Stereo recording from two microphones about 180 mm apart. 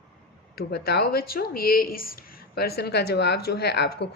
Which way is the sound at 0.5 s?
60° left (ahead or behind).